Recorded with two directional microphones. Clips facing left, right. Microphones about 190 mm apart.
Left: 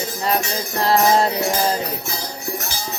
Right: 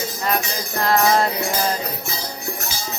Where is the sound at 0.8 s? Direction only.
30° left (ahead or behind).